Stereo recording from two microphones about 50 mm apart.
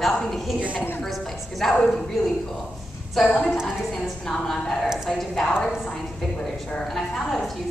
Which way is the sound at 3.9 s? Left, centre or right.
Centre.